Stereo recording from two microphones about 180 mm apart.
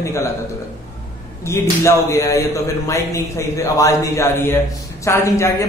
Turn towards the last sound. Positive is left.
turn(degrees=15)  # may be behind; listen again after turning